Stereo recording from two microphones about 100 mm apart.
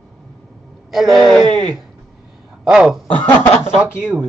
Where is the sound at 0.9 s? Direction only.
Centre (ahead or behind).